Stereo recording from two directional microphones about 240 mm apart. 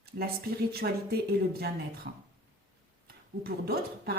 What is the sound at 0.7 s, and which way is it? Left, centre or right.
A woman's voice, right.